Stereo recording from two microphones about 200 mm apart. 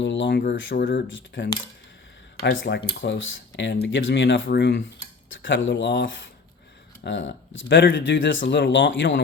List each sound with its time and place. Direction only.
0.0 s speech: 65° left (ahead or behind); by 1.0 s 45° left (ahead or behind)
1.0 s speech: 70° left (ahead or behind)
2.4 s speech: 55° left (ahead or behind)
5.3 s speech: 70° left (ahead or behind)